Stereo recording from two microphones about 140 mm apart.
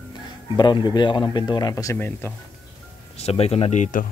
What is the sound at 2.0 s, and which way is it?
Speech, 15° left (ahead or behind).